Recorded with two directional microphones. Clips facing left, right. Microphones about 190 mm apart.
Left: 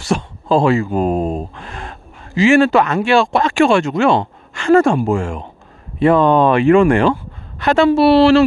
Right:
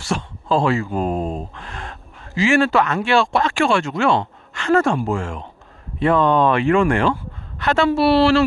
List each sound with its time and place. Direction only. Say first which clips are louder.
0.0 s speech: left 5 dB; 15° left (ahead or behind)
1.5 s a sound: left 3 dB; 10° left (ahead or behind)
2.3 s speech: left 5 dB; 20° left (ahead or behind)